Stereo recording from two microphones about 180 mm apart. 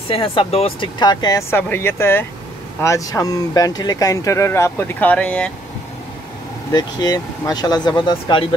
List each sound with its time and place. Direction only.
0.1 s speech: 30° left (ahead or behind); by 5.5 s 5° left (ahead or behind)
6.7 s speech: 20° left (ahead or behind)